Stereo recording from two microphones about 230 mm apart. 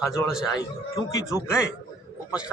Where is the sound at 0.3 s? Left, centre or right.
Centre.